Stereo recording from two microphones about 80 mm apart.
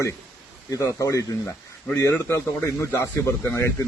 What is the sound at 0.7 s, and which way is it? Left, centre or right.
Speech, left.